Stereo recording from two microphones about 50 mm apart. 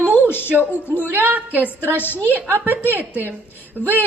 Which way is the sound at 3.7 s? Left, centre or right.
Centre.